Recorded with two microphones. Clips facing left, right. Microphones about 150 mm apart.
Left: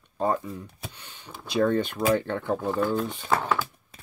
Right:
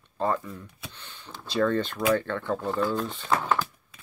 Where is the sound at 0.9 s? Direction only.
10° left (ahead or behind).